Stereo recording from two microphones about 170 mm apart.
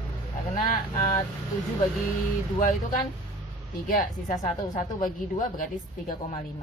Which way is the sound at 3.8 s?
50° left (ahead or behind).